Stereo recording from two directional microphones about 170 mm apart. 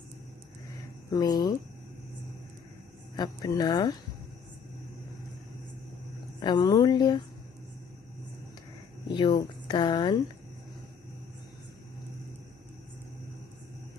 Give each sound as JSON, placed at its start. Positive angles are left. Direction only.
{"t": 1.1, "sound": "speech", "side_deg": 25}
{"t": 3.2, "sound": "speech", "side_deg": 25}
{"t": 6.4, "sound": "speech", "side_deg": 25}
{"t": 9.1, "sound": "speech", "side_deg": 25}